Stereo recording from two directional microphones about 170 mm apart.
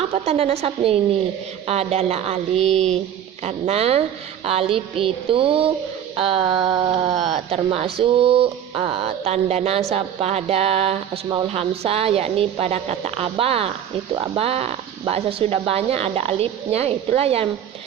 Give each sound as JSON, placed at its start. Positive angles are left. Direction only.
{"t": 0.0, "sound": "a woman's voice", "side_deg": -35}